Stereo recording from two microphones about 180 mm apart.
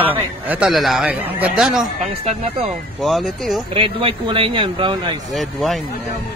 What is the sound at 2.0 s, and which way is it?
Speech, 35° right (ahead or behind).